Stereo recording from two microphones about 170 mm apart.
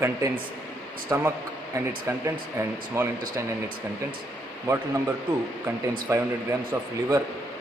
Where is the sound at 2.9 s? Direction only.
15° right (ahead or behind).